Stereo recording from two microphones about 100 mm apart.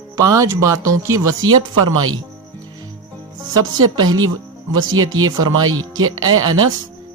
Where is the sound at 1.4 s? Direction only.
45° right (ahead or behind).